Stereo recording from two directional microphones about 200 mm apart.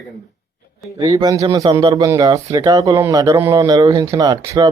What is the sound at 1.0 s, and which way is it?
Speech, 20° right (ahead or behind).